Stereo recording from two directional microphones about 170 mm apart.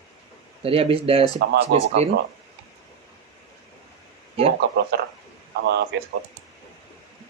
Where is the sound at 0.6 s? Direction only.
35° right (ahead or behind).